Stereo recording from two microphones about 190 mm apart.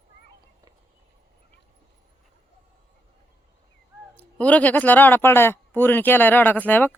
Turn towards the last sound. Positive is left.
turn(degrees=10)  # may be behind; listen again after turning